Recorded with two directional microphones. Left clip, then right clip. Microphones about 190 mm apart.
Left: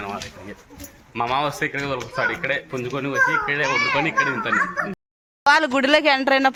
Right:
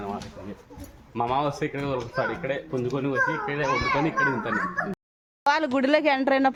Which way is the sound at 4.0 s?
25° right (ahead or behind).